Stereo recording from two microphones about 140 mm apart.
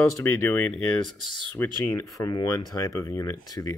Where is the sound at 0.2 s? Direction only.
15° left (ahead or behind).